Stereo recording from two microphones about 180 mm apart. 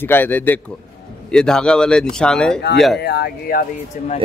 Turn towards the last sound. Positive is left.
turn(degrees=60)  # may be behind; listen again after turning